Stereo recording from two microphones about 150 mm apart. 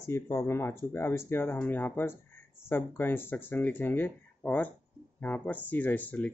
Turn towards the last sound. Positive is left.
turn(degrees=10)  # may be behind; listen again after turning